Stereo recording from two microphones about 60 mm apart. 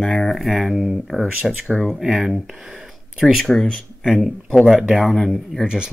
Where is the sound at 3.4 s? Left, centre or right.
Centre.